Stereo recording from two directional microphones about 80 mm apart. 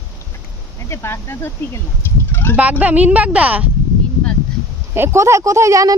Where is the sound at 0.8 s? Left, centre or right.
Left.